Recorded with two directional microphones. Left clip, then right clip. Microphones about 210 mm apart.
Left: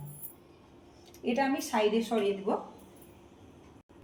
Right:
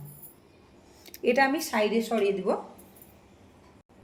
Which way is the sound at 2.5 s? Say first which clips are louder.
Right 4 dB; 55° right (ahead or behind).